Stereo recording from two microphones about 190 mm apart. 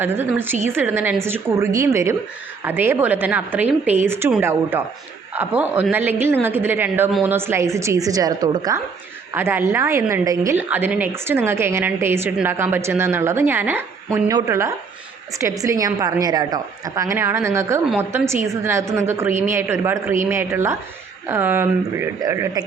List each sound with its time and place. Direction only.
0.0 s a woman's voice: 10° right (ahead or behind)